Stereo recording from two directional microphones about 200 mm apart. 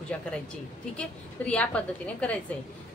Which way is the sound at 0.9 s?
5° left (ahead or behind).